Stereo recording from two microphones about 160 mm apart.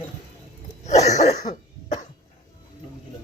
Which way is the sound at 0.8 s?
45° left (ahead or behind).